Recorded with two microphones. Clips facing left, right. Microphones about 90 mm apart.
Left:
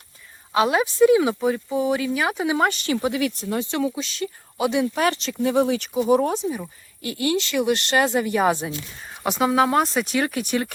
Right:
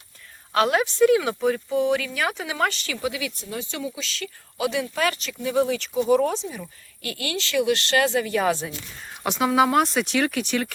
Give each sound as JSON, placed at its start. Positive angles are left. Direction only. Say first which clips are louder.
{"t": 0.5, "sound": "speech", "louder": "left 1 dB", "side_deg": 10}
{"t": 2.0, "sound": "speech", "louder": "left 4 dB", "side_deg": 20}
{"t": 2.9, "sound": "speech", "louder": "left 6 dB", "side_deg": 45}
{"t": 4.0, "sound": "speech", "louder": "left 5 dB", "side_deg": 20}
{"t": 9.2, "sound": "speech", "louder": "left 1 dB", "side_deg": 0}